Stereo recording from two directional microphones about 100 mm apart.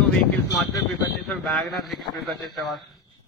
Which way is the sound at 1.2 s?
Centre (ahead or behind).